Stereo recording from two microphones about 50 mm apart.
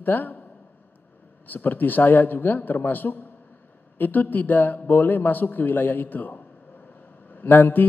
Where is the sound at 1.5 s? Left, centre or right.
Left.